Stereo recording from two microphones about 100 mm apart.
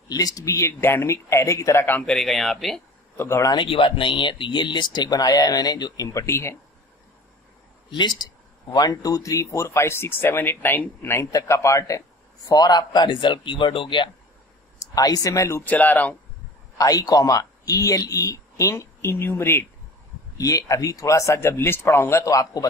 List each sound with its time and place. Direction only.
0.1 s speech: 40° left (ahead or behind); by 2.0 s 20° left (ahead or behind)
2.0 s speech: 5° left (ahead or behind)
3.2 s speech: 25° left (ahead or behind)
3.6 s speech: 60° left (ahead or behind); by 6.6 s 25° left (ahead or behind)
7.9 s speech: 50° left (ahead or behind); by 12.0 s 30° left (ahead or behind)
12.4 s speech: 45° left (ahead or behind)
14.8 s speech: 35° left (ahead or behind)
15.6 s speech: 15° left (ahead or behind)
16.7 s speech: 35° left (ahead or behind)
20.3 s speech: 35° left (ahead or behind)